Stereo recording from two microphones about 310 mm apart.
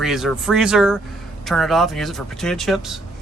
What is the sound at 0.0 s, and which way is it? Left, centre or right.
Speech, centre.